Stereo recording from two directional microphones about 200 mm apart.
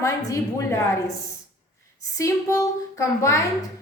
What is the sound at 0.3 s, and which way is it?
Speech, 15° left (ahead or behind).